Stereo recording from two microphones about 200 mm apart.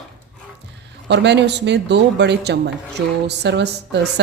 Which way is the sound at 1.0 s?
60° right (ahead or behind).